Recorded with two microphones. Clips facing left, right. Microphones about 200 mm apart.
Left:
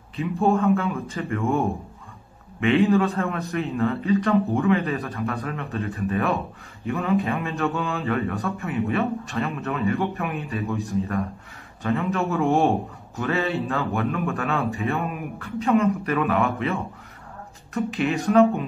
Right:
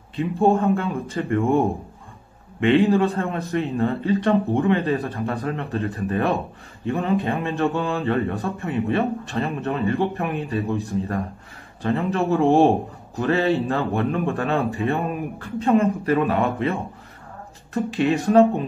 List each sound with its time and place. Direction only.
0.2 s a man's voice: 35° right (ahead or behind)
11.8 s a man's voice: 35° right (ahead or behind)